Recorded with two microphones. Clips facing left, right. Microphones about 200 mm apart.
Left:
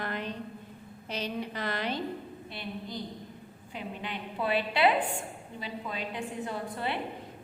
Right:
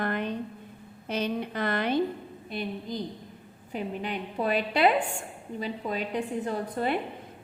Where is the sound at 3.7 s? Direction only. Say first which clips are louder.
Right 6 dB; 45° right (ahead or behind).